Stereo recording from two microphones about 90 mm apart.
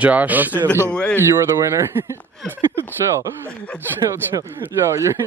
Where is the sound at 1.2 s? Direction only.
35° right (ahead or behind).